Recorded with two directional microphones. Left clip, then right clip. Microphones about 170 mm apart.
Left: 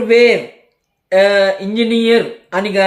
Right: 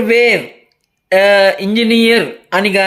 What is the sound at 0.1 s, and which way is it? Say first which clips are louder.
Speech: left 2 dB; 35° right (ahead or behind).